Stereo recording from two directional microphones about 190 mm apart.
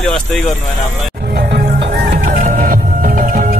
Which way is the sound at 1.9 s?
45° right (ahead or behind).